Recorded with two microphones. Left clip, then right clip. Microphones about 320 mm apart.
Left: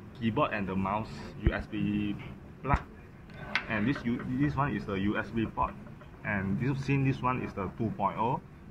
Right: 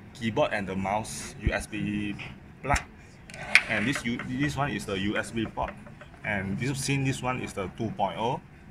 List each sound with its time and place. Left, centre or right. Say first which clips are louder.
0.2 s speech: right 3 dB; right
3.4 s speech: right 8 dB; right